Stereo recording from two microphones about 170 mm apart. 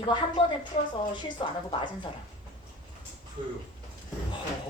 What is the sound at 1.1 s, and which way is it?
Speech, 25° left (ahead or behind).